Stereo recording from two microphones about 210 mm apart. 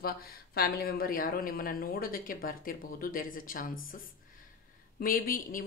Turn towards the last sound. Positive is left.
turn(degrees=40)  # may be behind; listen again after turning